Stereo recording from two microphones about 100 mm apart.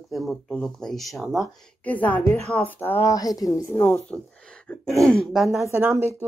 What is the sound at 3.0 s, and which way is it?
Speech, 35° left (ahead or behind).